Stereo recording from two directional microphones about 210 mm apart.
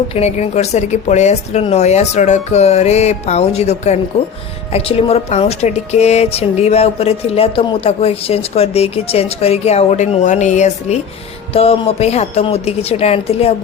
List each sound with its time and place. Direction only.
0.1 s a woman's voice: 30° left (ahead or behind)